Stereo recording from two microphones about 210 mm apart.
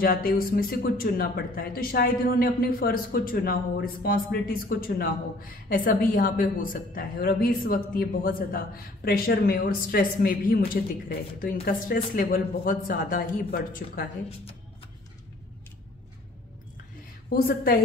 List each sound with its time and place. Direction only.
0.0 s speech: 45° left (ahead or behind)
11.6 s speech: 45° left (ahead or behind)
17.3 s speech: 45° left (ahead or behind)